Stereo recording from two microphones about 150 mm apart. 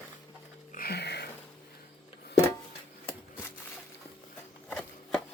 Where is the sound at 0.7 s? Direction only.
85° left.